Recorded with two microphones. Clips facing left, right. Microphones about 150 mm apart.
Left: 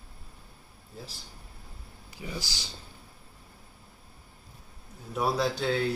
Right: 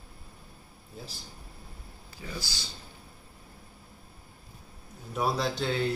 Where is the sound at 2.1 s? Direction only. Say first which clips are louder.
Left 2 dB; 15° left (ahead or behind).